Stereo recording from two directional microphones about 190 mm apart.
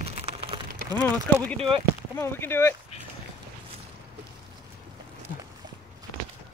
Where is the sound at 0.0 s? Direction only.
35° right (ahead or behind).